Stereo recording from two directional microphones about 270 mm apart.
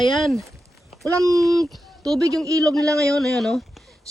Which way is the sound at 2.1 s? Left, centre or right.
Centre.